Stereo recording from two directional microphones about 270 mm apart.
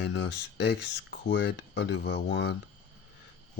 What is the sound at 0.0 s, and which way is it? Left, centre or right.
Speech, left.